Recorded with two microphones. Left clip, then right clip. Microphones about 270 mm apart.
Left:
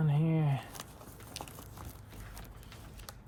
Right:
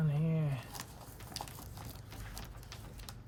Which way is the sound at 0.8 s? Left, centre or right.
Centre.